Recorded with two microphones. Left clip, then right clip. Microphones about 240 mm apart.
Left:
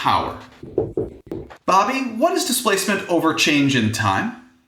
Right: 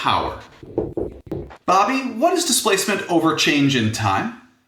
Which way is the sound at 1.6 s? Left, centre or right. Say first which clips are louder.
Even; centre.